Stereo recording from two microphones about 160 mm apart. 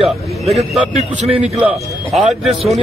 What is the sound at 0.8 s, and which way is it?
Speech, 40° right (ahead or behind).